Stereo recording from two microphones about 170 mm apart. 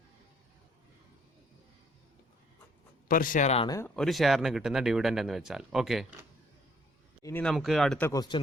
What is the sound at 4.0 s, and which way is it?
Speech, centre (ahead or behind).